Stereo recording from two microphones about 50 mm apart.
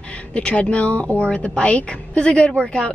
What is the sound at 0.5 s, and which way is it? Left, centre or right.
Speech, left.